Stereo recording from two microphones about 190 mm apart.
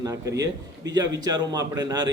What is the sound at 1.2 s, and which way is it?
Speech, 20° right (ahead or behind).